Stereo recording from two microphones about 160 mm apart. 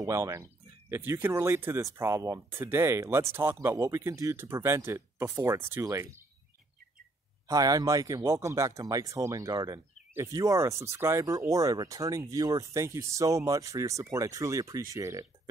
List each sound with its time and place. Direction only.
0.0 s speech: 20° right (ahead or behind)
7.4 s speech: 20° right (ahead or behind)